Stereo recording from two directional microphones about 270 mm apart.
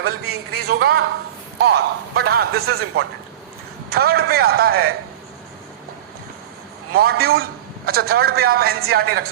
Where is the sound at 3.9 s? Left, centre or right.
Right.